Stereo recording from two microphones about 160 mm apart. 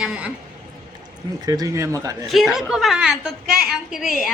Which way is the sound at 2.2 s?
Centre (ahead or behind).